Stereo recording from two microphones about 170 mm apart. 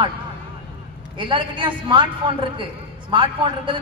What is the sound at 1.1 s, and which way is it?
A man's voice, 30° right (ahead or behind).